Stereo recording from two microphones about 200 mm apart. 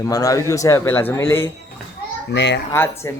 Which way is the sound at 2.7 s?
10° left (ahead or behind).